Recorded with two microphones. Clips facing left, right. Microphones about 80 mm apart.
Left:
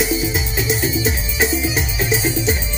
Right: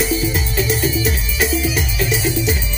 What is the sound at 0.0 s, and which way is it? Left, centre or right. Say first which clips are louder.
Music: right 1 dB; centre.